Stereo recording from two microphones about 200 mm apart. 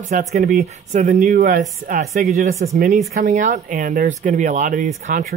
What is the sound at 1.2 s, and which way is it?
Speech, 50° right (ahead or behind).